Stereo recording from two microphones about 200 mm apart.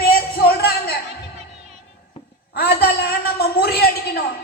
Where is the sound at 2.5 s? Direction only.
50° left (ahead or behind).